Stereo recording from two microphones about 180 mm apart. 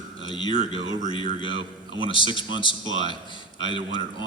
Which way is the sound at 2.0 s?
25° left (ahead or behind).